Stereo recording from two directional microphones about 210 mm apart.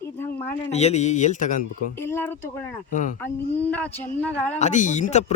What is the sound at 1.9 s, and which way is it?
Speech, 10° left (ahead or behind).